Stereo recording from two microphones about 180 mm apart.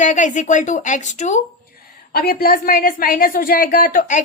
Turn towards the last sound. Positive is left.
turn(degrees=50)  # may be behind; listen again after turning